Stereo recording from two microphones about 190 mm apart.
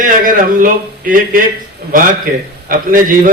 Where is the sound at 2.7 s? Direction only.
45° right (ahead or behind).